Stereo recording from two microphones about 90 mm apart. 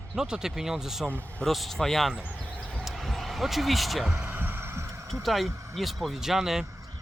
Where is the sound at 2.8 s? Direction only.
Centre (ahead or behind).